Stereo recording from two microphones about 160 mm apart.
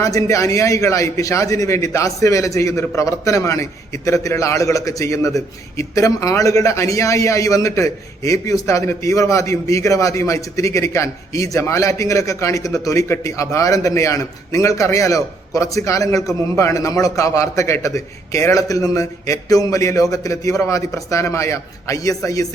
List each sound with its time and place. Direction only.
0.0 s a man's voice: 20° left (ahead or behind)